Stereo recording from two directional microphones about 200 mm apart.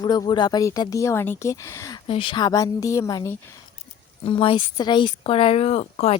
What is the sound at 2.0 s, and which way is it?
Speech, 25° left (ahead or behind).